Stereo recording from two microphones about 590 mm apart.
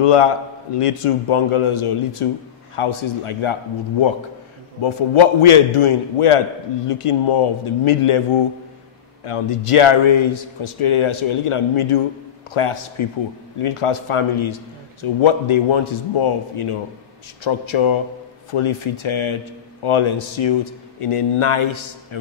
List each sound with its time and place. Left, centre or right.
0.0 s a man's voice: left
4.8 s a man's voice: left
9.2 s a man's voice: left